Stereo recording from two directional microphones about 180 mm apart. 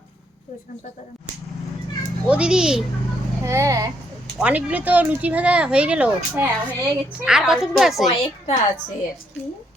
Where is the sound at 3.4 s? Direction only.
15° right (ahead or behind).